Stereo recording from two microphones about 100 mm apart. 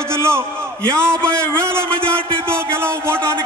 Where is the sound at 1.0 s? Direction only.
10° left (ahead or behind).